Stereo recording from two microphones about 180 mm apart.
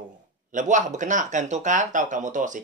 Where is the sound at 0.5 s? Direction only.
45° right (ahead or behind).